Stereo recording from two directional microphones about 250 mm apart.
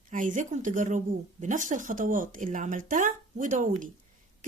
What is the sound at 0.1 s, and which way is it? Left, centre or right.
Speech, right.